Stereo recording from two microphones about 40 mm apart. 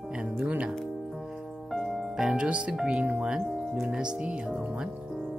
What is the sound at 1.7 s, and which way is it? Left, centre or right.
Music, centre.